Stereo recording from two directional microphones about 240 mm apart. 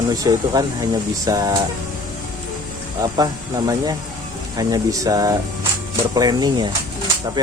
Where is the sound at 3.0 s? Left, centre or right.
Centre.